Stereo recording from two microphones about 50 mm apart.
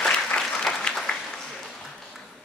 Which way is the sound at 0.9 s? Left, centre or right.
Centre.